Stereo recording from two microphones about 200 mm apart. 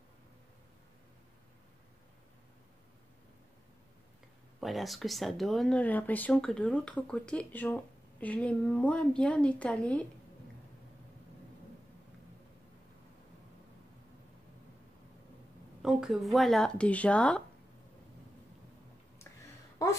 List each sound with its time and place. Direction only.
4.6 s speech: centre (ahead or behind)
15.8 s speech: centre (ahead or behind)
19.8 s speech: 15° left (ahead or behind)